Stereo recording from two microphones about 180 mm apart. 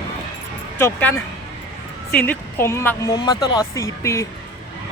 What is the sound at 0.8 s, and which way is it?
Speech, 15° left (ahead or behind).